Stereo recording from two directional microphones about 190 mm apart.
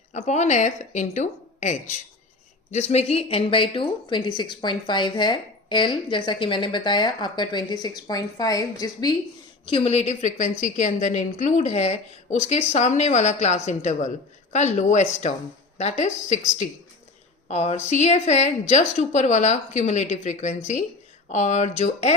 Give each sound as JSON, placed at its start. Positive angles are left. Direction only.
{"t": 0.1, "sound": "a woman's voice", "side_deg": 35}